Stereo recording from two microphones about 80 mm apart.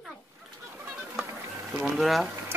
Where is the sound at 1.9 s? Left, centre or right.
Centre.